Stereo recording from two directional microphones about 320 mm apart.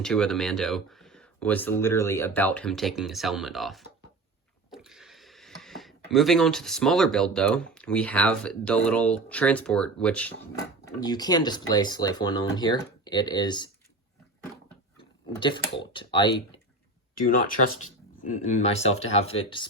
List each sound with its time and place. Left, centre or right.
0.0 s speech: centre
14.9 s speech: centre